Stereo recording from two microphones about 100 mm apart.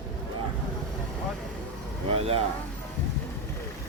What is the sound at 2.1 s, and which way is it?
Speech, 85° right.